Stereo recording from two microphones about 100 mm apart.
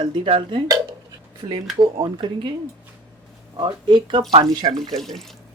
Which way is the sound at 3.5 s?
50° right (ahead or behind).